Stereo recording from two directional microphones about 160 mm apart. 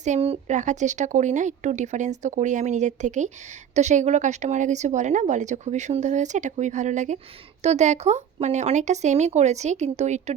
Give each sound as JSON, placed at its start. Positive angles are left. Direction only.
{"t": 0.0, "sound": "speech", "side_deg": -45}